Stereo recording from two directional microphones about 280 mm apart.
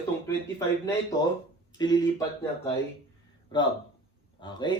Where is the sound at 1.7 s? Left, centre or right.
Centre.